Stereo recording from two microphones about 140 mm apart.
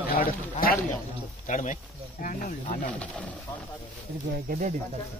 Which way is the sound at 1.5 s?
65° left (ahead or behind).